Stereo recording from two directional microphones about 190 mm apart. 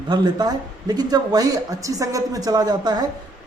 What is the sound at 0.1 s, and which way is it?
Speech, 20° right (ahead or behind).